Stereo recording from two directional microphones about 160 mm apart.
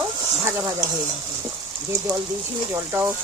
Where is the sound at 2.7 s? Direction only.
15° right (ahead or behind).